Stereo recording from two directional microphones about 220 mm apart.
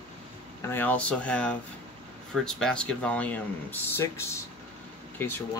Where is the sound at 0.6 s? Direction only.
10° left (ahead or behind).